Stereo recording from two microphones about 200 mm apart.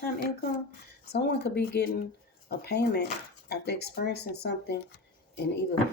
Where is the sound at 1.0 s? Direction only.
55° left (ahead or behind).